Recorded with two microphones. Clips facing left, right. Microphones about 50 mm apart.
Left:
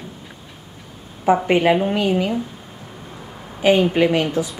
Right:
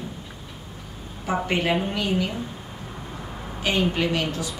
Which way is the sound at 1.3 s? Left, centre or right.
Centre.